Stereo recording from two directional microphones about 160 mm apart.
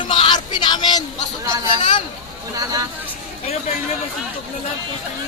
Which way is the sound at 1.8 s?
35° left (ahead or behind).